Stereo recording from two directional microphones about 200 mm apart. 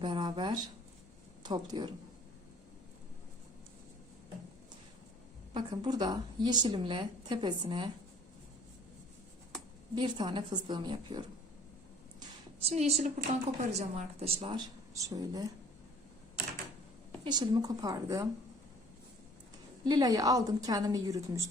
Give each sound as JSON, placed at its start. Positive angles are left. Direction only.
{"t": 0.0, "sound": "a woman's voice", "side_deg": -25}
{"t": 5.5, "sound": "a woman's voice", "side_deg": -20}
{"t": 9.9, "sound": "a woman's voice", "side_deg": -20}
{"t": 12.6, "sound": "a woman's voice", "side_deg": -30}
{"t": 17.2, "sound": "a woman's voice", "side_deg": -20}
{"t": 19.8, "sound": "a woman's voice", "side_deg": -20}